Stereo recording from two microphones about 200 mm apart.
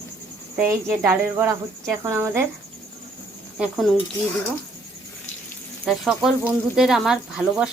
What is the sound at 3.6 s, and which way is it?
Speech, centre (ahead or behind).